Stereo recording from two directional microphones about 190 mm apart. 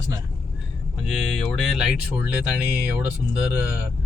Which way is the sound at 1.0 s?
Centre (ahead or behind).